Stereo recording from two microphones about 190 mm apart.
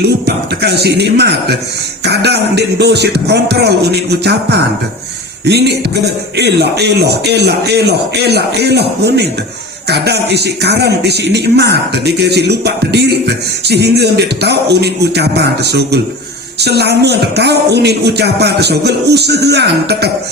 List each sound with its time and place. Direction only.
0.0 s speech: 60° right (ahead or behind)